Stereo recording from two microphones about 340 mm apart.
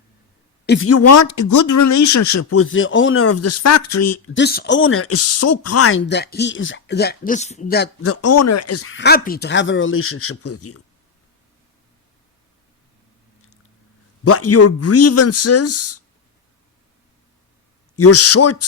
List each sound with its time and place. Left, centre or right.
0.6 s a sound: left
0.9 s speech: left
4.4 s speech: left
8.0 s speech: left
14.3 s speech: left
17.9 s speech: left